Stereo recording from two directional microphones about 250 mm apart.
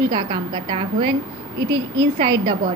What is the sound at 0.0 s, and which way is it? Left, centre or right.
A woman's voice, centre.